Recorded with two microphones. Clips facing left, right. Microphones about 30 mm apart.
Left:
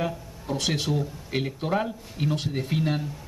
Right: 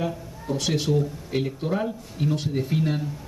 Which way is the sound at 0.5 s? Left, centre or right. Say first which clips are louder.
Right 2 dB; centre.